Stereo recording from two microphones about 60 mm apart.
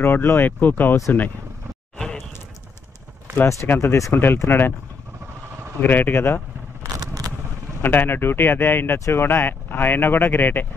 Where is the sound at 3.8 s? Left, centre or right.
Left.